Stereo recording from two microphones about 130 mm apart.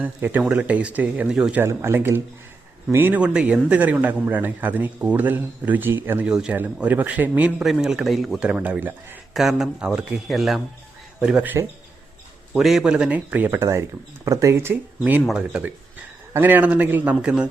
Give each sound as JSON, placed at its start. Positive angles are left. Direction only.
{"t": 0.0, "sound": "a man's voice", "side_deg": -15}
{"t": 1.6, "sound": "a man's voice", "side_deg": -20}